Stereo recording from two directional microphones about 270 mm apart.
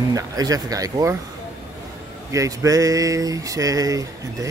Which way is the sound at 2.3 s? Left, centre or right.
Centre.